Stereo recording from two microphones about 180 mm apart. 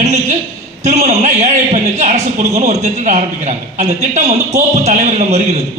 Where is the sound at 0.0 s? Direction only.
40° right (ahead or behind).